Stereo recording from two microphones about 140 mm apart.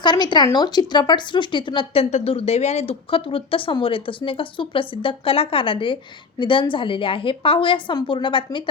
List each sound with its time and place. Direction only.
0.0 s speech: 30° left (ahead or behind)